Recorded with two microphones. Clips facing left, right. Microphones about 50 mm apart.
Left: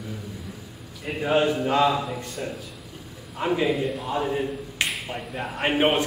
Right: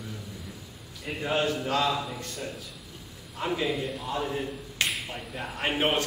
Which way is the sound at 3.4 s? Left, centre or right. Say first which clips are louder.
Left 5 dB; centre.